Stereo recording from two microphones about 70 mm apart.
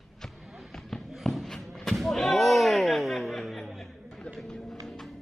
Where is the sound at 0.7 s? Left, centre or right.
Centre.